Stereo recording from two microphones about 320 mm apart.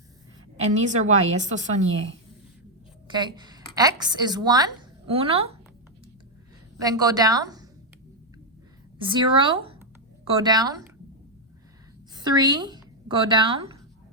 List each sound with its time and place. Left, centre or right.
0.7 s a woman's voice: right
3.1 s a woman's voice: centre
6.7 s a woman's voice: centre
9.0 s speech: centre
12.1 s a woman's voice: centre